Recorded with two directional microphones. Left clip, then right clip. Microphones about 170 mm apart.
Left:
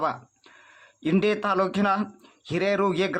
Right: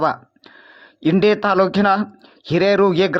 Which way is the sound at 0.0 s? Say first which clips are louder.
Right 8 dB; 30° right (ahead or behind).